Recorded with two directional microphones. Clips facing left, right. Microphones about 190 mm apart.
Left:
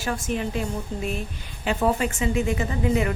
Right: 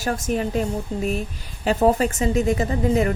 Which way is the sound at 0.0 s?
45° right (ahead or behind).